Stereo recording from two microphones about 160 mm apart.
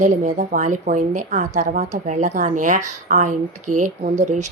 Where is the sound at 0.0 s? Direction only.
50° right (ahead or behind).